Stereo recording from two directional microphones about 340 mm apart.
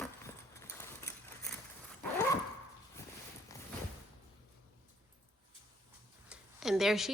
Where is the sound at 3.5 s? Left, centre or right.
Centre.